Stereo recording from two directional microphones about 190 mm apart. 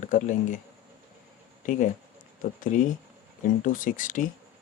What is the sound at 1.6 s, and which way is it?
Speech, 40° left (ahead or behind).